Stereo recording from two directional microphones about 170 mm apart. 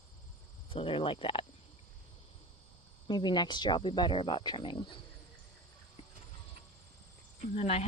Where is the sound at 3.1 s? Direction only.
25° left (ahead or behind).